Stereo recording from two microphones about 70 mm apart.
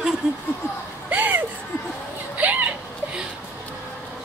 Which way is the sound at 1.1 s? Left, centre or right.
Right.